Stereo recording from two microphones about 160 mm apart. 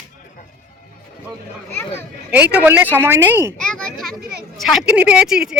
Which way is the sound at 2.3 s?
10° right (ahead or behind).